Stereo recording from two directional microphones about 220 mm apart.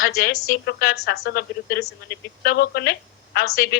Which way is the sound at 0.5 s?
45° left (ahead or behind).